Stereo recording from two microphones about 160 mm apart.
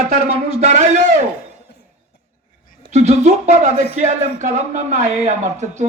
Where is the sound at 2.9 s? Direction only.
45° right (ahead or behind).